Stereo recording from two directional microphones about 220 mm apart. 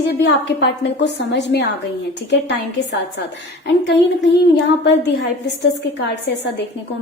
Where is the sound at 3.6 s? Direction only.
55° left (ahead or behind).